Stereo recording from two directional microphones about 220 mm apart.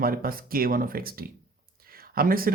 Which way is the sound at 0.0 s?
40° right (ahead or behind).